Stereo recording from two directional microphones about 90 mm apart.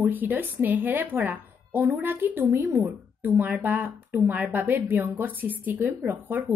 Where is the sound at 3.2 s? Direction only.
20° right (ahead or behind).